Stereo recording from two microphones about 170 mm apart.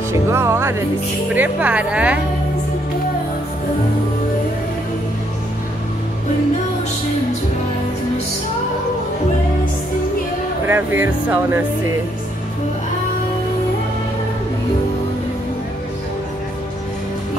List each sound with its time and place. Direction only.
0.3 s speech: 15° right (ahead or behind)
10.7 s speech: 10° right (ahead or behind)